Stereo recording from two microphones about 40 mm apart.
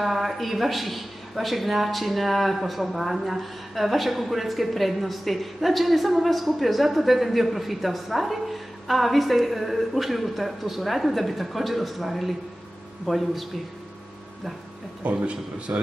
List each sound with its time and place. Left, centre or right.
0.0 s a man's voice: centre
15.0 s speech: right